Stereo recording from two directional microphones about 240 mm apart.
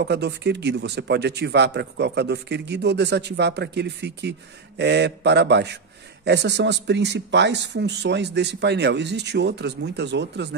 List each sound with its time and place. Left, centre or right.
0.0 s speech: right